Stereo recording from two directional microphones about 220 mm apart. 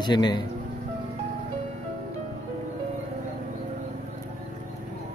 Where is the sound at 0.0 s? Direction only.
20° left (ahead or behind).